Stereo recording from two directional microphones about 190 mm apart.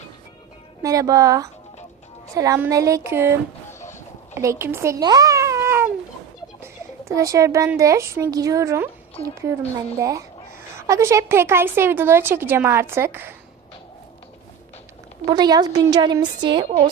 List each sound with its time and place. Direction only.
0.8 s a woman's voice: 20° right (ahead or behind)
3.7 s a sound: 15° left (ahead or behind)
4.4 s babbling: 15° right (ahead or behind)
6.6 s a woman's voice: 15° right (ahead or behind)
15.3 s a woman's voice: 20° right (ahead or behind)